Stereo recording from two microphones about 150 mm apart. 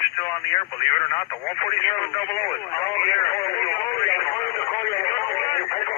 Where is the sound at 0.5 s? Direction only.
20° left (ahead or behind).